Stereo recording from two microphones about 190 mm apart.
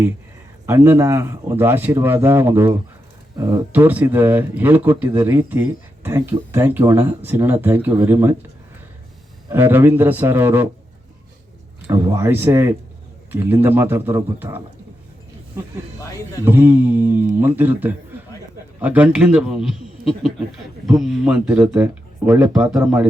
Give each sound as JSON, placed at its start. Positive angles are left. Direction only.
{"t": 0.7, "sound": "speech", "side_deg": -10}
{"t": 9.5, "sound": "speech", "side_deg": -10}
{"t": 11.9, "sound": "speech", "side_deg": -15}
{"t": 16.0, "sound": "speech", "side_deg": 15}
{"t": 16.4, "sound": "a man's voice", "side_deg": -10}